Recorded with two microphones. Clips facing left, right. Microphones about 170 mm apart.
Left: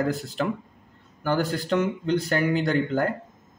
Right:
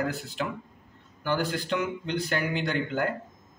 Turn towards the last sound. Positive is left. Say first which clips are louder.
# left 5 dB
turn(degrees=40)  # may be behind; listen again after turning